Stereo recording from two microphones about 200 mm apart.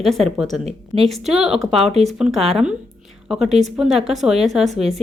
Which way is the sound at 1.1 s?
Centre (ahead or behind).